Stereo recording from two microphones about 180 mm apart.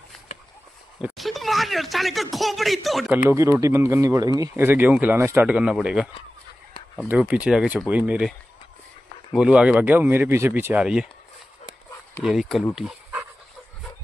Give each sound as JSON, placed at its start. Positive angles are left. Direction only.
{"t": 1.0, "sound": "speech", "side_deg": 0}
{"t": 3.3, "sound": "speech", "side_deg": -15}
{"t": 7.1, "sound": "speech", "side_deg": -10}
{"t": 12.2, "sound": "speech", "side_deg": 0}